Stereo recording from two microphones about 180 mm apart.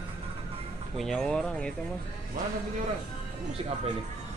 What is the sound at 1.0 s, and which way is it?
Speech, 5° left (ahead or behind).